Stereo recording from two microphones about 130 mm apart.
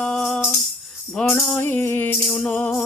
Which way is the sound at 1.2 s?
10° left (ahead or behind).